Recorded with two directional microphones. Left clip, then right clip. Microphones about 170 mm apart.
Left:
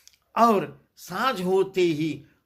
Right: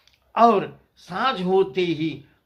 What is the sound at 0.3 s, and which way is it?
Speech, 40° left (ahead or behind).